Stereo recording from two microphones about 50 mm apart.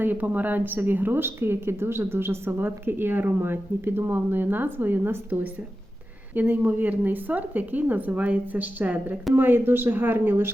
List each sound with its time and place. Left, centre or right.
0.0 s a woman's voice: right
9.3 s a woman's voice: right